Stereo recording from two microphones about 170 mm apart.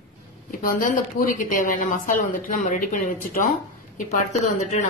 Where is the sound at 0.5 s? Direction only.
55° left (ahead or behind).